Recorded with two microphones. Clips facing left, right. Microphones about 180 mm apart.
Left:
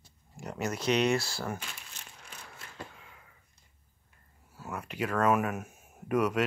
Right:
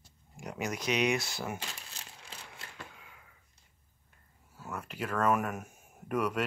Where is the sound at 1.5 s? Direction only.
30° right (ahead or behind).